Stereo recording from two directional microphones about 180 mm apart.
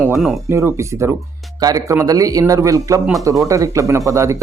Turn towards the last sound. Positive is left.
turn(degrees=-15)  # may be behind; listen again after turning